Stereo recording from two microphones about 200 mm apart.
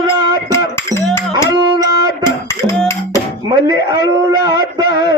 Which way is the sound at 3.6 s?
20° right (ahead or behind).